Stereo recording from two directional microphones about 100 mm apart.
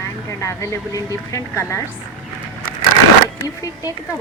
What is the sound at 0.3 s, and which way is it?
Speech, 30° left (ahead or behind).